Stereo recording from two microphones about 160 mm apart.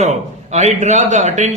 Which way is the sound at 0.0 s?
45° right (ahead or behind).